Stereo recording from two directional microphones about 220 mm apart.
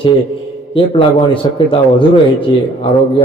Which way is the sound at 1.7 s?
25° left (ahead or behind).